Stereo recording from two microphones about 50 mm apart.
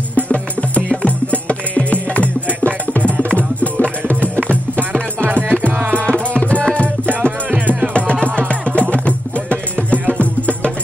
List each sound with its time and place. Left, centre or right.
0.1 s music: left
5.3 s music: right
6.0 s music: left
7.5 s music: right
7.9 s music: left